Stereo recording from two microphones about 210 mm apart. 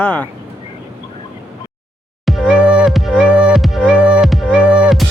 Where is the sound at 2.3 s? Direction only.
5° right (ahead or behind).